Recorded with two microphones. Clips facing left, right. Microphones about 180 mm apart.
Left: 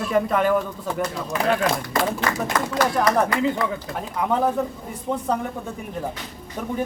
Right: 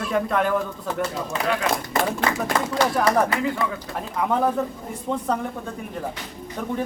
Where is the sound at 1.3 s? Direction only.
25° right (ahead or behind).